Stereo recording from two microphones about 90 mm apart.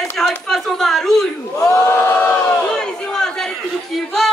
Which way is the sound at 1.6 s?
30° left (ahead or behind).